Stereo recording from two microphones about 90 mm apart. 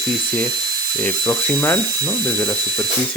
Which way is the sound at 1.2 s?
10° left (ahead or behind).